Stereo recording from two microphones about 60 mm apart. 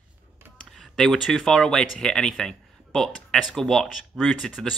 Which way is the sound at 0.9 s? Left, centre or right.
Centre.